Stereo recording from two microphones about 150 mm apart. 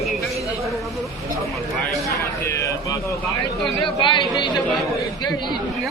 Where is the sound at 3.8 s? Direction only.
30° left (ahead or behind).